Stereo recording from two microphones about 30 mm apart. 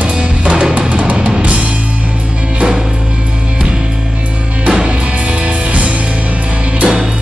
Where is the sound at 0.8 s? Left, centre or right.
Right.